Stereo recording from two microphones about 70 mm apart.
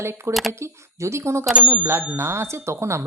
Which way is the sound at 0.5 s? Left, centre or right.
Right.